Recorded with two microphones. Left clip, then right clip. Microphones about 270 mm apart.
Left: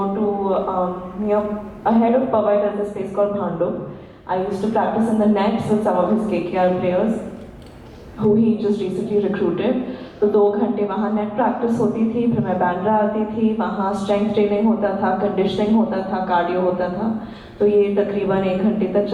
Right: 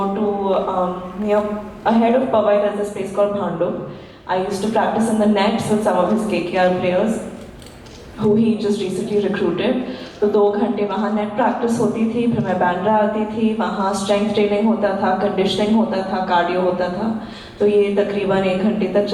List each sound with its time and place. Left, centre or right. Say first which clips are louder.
0.0 s a sound: right 1 dB; centre
0.6 s a sound: right 1 dB; left
1.3 s a woman's voice: right 2 dB; centre
8.4 s a woman's voice: right 1 dB; centre
10.2 s speech: even; centre
10.6 s a woman's voice: right 1 dB; centre
11.9 s a woman's voice: right 1 dB; centre
16.9 s speech: right 1 dB; left
17.6 s a woman's voice: right 1 dB; centre